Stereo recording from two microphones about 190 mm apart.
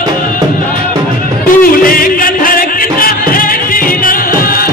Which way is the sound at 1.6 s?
50° left (ahead or behind).